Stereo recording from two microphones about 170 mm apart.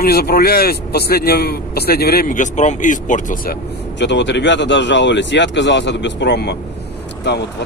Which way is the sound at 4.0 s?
90° left.